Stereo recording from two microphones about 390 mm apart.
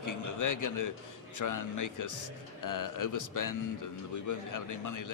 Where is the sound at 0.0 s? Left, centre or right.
Left.